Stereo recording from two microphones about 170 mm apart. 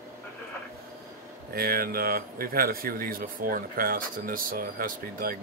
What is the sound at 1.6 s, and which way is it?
Speech, 60° right (ahead or behind).